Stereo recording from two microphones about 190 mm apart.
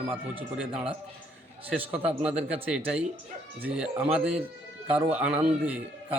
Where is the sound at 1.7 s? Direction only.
5° right (ahead or behind).